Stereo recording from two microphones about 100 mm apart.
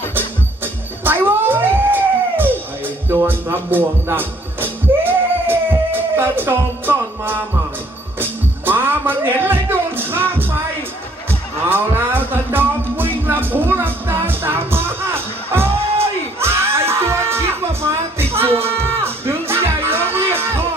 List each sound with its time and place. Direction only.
0.1 s music: 20° right (ahead or behind)